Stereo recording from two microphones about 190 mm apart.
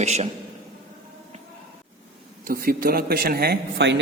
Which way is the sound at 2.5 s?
50° right (ahead or behind).